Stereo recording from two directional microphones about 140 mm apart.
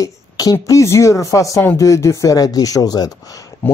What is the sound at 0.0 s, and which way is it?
Speech, 25° left (ahead or behind).